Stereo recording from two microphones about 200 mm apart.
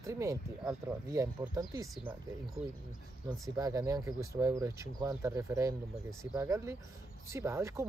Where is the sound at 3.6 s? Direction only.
15° right (ahead or behind).